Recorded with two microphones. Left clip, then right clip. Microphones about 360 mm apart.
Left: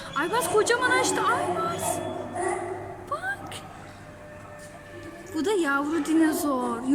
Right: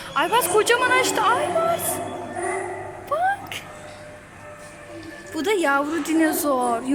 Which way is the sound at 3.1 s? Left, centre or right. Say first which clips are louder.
Right 9 dB; centre.